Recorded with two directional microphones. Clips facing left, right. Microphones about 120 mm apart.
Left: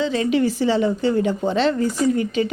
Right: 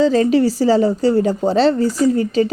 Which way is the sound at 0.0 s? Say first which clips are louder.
Right 6 dB; 40° right (ahead or behind).